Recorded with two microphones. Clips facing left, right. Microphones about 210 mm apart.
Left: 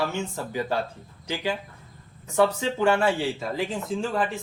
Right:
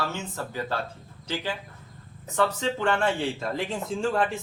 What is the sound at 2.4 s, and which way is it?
A man's voice, 10° left (ahead or behind).